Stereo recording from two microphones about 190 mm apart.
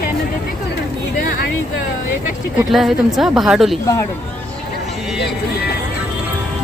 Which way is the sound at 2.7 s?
Centre (ahead or behind).